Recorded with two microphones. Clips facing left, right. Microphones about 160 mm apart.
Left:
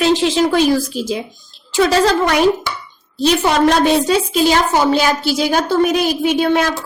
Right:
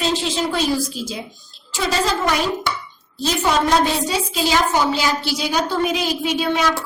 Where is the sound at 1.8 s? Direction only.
65° left (ahead or behind).